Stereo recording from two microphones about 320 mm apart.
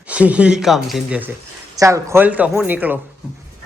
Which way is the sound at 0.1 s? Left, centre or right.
Centre.